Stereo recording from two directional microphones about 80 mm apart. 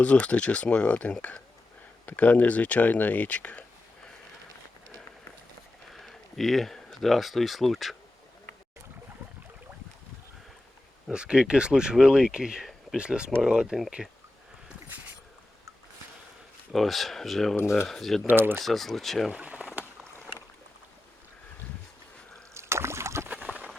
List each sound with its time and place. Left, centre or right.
0.0 s speech: centre
5.9 s speech: centre
11.1 s speech: centre
16.7 s speech: centre
17.6 s speech: left
17.8 s speech: centre
18.3 s speech: right
18.6 s speech: centre
19.3 s a sound: centre
22.5 s boat: right
23.3 s boat: centre